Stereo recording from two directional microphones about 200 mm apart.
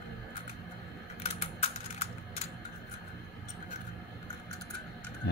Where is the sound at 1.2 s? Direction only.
30° left (ahead or behind).